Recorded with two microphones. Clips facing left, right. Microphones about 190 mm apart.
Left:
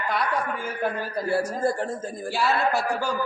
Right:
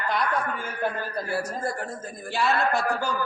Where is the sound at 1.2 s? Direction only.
30° left (ahead or behind).